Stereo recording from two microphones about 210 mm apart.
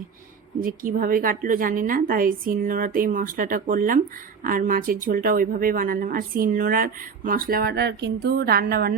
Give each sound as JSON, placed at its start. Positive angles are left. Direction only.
{"t": 0.6, "sound": "a woman's voice", "side_deg": -40}